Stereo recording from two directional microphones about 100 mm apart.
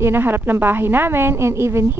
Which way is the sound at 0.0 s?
20° right (ahead or behind).